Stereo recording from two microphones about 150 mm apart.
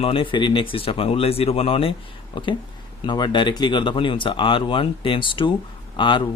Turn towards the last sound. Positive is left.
turn(degrees=30)  # may be behind; listen again after turning